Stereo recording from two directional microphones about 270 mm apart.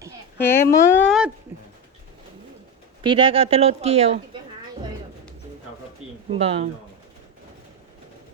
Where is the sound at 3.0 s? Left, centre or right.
Centre.